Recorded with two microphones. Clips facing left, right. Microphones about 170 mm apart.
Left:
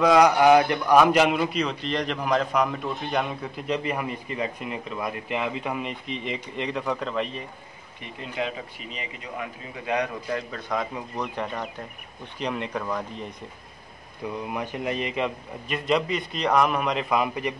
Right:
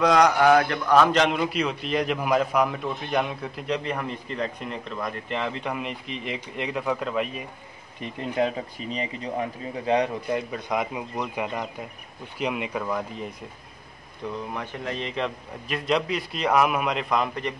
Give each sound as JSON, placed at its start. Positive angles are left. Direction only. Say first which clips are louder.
{"t": 0.0, "sound": "a man's voice", "louder": "left 1 dB", "side_deg": 5}
{"t": 0.4, "sound": "a man's voice", "louder": "left 2 dB", "side_deg": 15}
{"t": 8.4, "sound": "speech", "louder": "right 5 dB", "side_deg": -40}
{"t": 10.5, "sound": "a man's voice", "louder": "right 2 dB", "side_deg": -15}
{"t": 14.2, "sound": "a man's voice", "louder": "left 1 dB", "side_deg": 10}